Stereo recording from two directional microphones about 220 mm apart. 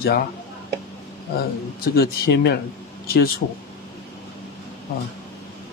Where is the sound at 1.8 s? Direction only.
45° left (ahead or behind).